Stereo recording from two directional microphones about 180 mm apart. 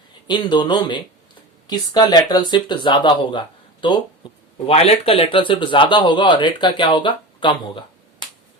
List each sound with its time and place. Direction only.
0.3 s speech: 25° left (ahead or behind)